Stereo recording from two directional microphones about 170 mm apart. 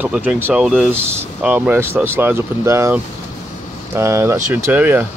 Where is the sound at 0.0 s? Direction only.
5° right (ahead or behind).